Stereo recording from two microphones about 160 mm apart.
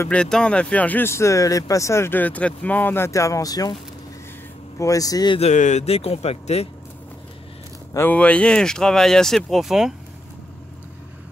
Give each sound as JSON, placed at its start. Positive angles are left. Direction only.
{"t": 0.0, "sound": "speech", "side_deg": 5}
{"t": 4.7, "sound": "speech", "side_deg": 20}
{"t": 5.4, "sound": "speech", "side_deg": 45}
{"t": 7.9, "sound": "speech", "side_deg": 10}